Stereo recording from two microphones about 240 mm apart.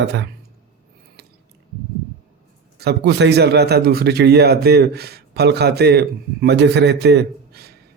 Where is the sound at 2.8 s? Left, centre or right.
Right.